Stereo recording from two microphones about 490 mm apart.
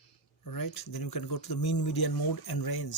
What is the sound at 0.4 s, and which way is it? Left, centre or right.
Speech, left.